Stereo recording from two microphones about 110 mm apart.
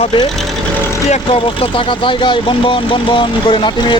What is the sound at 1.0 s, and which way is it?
Speech, 90° left.